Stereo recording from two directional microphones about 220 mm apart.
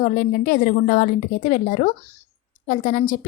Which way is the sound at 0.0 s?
40° left (ahead or behind).